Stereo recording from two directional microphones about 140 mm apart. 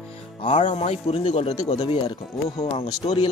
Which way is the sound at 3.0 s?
45° left (ahead or behind).